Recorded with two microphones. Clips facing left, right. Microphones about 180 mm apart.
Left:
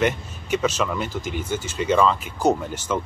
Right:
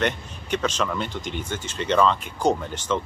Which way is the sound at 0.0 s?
5° left (ahead or behind).